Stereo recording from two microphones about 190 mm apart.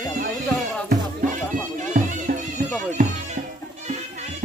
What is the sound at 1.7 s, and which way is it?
Music, 40° right (ahead or behind).